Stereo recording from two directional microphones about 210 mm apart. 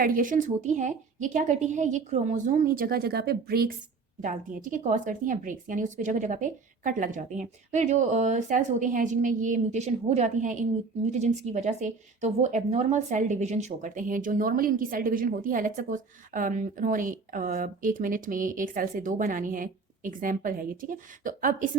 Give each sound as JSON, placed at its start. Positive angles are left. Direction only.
{"t": 0.0, "sound": "speech", "side_deg": -40}